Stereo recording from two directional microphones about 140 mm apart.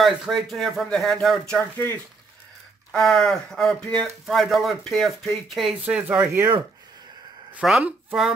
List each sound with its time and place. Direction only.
0.0 s speech: centre (ahead or behind)
2.9 s speech: centre (ahead or behind)
7.5 s speech: 5° right (ahead or behind)